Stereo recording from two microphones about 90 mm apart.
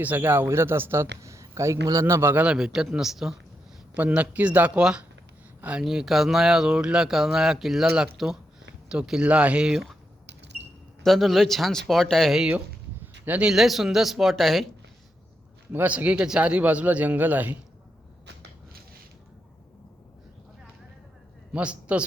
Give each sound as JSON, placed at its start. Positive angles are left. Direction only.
{"t": 0.0, "sound": "a man's voice", "side_deg": -20}
{"t": 2.4, "sound": "speech", "side_deg": -10}
{"t": 3.9, "sound": "speech", "side_deg": -15}
{"t": 5.8, "sound": "speech", "side_deg": -5}
{"t": 11.0, "sound": "speech", "side_deg": 0}
{"t": 12.5, "sound": "a sound", "side_deg": -20}
{"t": 13.5, "sound": "speech", "side_deg": -5}
{"t": 15.7, "sound": "speech", "side_deg": -20}
{"t": 21.5, "sound": "a man's voice", "side_deg": -15}